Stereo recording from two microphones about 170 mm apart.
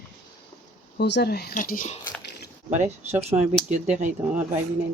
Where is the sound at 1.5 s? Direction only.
50° left (ahead or behind).